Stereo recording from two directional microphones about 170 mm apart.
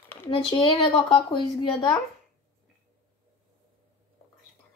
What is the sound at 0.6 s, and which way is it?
Speech, 25° left (ahead or behind).